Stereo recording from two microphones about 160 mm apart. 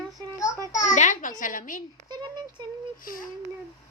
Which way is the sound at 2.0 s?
30° right (ahead or behind).